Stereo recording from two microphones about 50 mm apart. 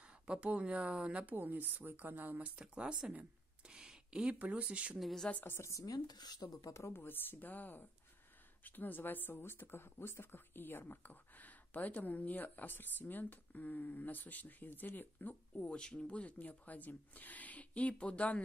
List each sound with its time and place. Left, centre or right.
0.0 s speech: right
1.3 s speech: right
2.5 s speech: centre
3.6 s a sound: centre
4.4 s speech: right
5.2 s speech: centre
5.6 s speech: left
6.9 s speech: left
15.6 s speech: left